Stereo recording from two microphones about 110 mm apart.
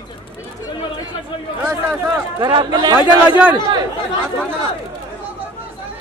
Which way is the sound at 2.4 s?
40° right (ahead or behind).